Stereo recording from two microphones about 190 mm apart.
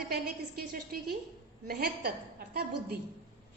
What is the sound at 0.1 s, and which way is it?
A woman's voice, 55° right (ahead or behind).